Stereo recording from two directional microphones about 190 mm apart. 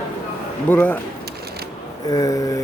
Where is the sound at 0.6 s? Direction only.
10° left (ahead or behind).